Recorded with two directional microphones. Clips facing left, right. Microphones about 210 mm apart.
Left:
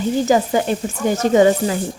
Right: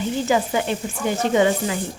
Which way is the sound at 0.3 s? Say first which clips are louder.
Left 3 dB; 40° left (ahead or behind).